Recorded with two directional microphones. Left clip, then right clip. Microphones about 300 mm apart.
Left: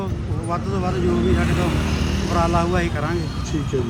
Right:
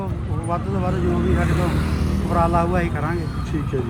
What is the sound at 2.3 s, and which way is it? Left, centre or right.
Speech, centre.